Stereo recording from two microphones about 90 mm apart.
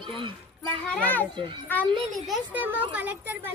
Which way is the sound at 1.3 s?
65° right (ahead or behind).